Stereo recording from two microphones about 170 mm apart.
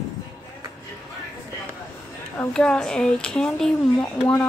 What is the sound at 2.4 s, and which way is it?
A woman's voice, 5° left (ahead or behind).